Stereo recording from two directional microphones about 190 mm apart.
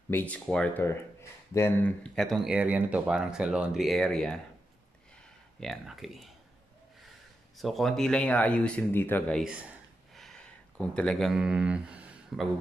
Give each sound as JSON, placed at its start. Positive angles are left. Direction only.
{"t": 0.1, "sound": "speech", "side_deg": 10}
{"t": 5.6, "sound": "speech", "side_deg": 0}
{"t": 7.5, "sound": "speech", "side_deg": 0}
{"t": 9.4, "sound": "speech", "side_deg": -5}
{"t": 10.1, "sound": "a sound", "side_deg": 5}